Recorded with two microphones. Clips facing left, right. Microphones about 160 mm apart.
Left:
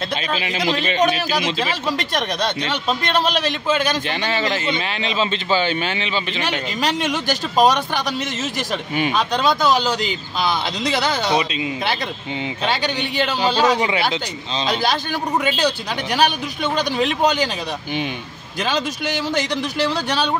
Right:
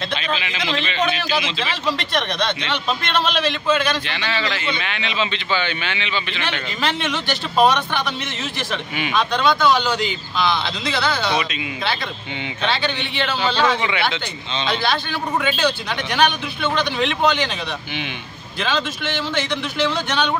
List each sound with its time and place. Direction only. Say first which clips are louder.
0.1 s a man's voice: left 2 dB; 40° left (ahead or behind)
12.6 s a man's voice: even; 40° left (ahead or behind)
18.6 s a man's voice: left 1 dB; 40° left (ahead or behind)